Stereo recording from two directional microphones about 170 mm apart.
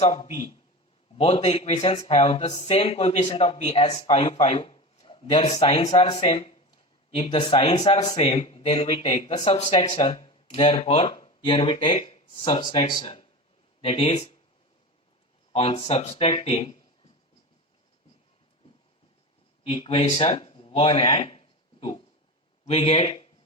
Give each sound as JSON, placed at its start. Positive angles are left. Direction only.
{"t": 0.0, "sound": "a man's voice", "side_deg": 40}
{"t": 8.0, "sound": "speech", "side_deg": 25}
{"t": 9.8, "sound": "speech", "side_deg": 25}
{"t": 10.1, "sound": "speech", "side_deg": 35}
{"t": 15.5, "sound": "speech", "side_deg": 35}
{"t": 19.6, "sound": "speech", "side_deg": 35}